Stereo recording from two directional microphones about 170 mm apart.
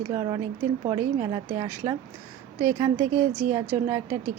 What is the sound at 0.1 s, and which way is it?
A woman's voice, 30° right (ahead or behind).